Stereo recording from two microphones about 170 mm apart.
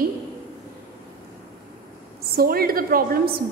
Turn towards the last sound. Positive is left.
turn(degrees=-60)  # may be behind; listen again after turning